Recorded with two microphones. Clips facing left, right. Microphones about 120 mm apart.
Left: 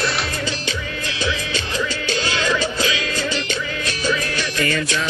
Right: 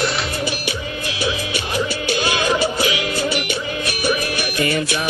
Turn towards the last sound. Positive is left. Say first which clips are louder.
# right 2 dB
turn(degrees=-20)  # may be behind; listen again after turning